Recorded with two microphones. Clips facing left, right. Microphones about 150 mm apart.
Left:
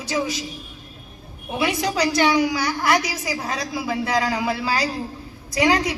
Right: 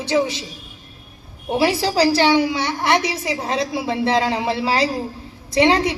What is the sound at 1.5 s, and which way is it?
A woman's voice, 30° right (ahead or behind).